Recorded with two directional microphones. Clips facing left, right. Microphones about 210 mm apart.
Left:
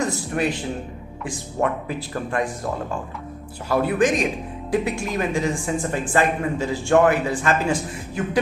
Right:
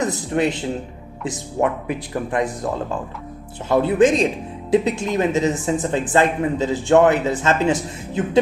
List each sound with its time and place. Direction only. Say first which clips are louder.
0.0 s a man's voice: right 3 dB; 20° right (ahead or behind)
3.7 s speech: right 4 dB; 20° right (ahead or behind)